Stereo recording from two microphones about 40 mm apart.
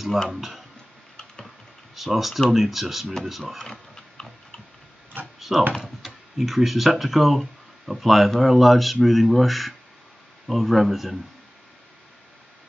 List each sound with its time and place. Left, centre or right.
0.3 s speech: centre
2.0 s speech: centre
3.5 s mechanisms: centre
5.5 s speech: centre